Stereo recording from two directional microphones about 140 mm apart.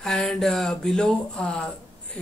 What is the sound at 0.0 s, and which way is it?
Speech, 5° left (ahead or behind).